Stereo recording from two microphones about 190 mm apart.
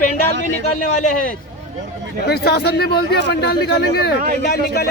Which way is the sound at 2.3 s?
60° left (ahead or behind).